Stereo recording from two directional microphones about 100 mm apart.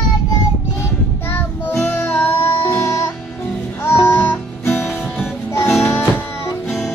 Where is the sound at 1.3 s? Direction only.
20° left (ahead or behind).